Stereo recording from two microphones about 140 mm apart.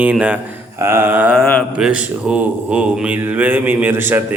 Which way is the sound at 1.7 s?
5° right (ahead or behind).